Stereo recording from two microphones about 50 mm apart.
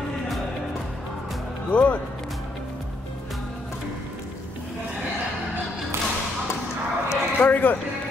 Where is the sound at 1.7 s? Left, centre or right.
Left.